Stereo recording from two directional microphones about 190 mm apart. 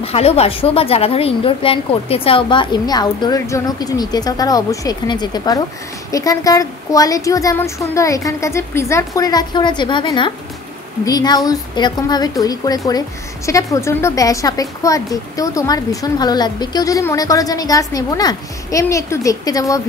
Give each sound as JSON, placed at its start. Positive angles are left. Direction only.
{"t": 0.0, "sound": "a woman's voice", "side_deg": 35}